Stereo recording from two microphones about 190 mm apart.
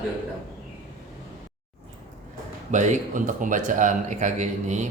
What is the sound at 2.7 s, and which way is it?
Speech, 40° right (ahead or behind).